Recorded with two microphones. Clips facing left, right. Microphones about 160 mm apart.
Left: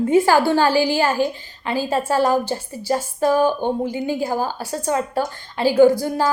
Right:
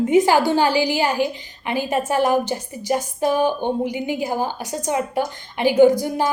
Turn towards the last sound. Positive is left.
turn(degrees=-20)  # may be behind; listen again after turning